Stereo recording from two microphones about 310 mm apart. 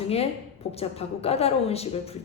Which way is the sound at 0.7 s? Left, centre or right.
Centre.